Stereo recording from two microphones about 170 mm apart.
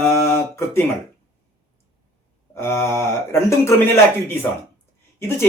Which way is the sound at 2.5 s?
15° left (ahead or behind).